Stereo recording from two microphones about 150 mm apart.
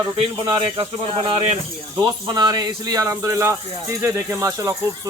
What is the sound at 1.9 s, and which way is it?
Speech, 25° right (ahead or behind).